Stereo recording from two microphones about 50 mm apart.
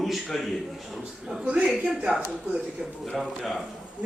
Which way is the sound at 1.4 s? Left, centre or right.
Right.